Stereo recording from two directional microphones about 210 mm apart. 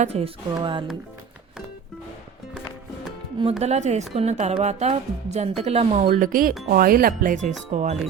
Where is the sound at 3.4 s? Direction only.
30° right (ahead or behind).